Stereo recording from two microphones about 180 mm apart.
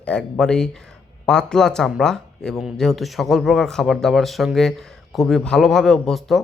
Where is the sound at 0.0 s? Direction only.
5° left (ahead or behind).